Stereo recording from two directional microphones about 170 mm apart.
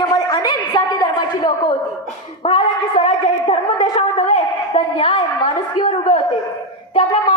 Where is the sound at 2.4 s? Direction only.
35° left (ahead or behind).